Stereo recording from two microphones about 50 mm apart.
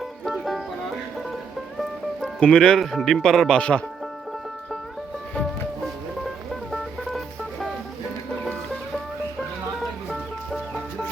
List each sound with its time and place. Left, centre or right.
0.3 s music: centre
2.2 s speech: centre
2.8 s speech: centre; by 3.8 s left